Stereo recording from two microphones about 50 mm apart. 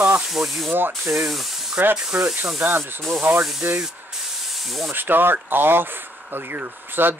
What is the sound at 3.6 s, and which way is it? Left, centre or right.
Speech, right.